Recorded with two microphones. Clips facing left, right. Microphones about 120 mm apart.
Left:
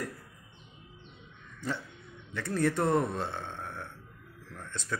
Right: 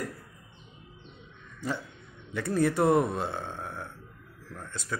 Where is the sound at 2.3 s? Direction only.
10° right (ahead or behind).